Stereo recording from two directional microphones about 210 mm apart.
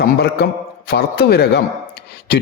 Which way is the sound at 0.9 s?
50° left (ahead or behind).